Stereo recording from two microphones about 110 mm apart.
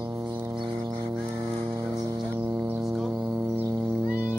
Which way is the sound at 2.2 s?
15° right (ahead or behind).